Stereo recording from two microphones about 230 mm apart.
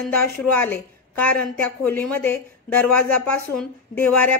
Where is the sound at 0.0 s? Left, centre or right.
Centre.